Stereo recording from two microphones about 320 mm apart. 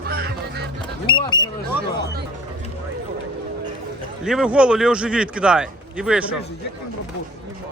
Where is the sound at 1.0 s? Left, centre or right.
Centre.